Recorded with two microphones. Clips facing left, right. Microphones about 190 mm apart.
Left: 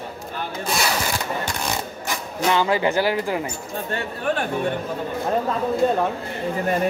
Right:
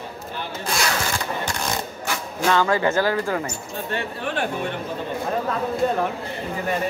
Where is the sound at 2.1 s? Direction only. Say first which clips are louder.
Even; 15° left (ahead or behind).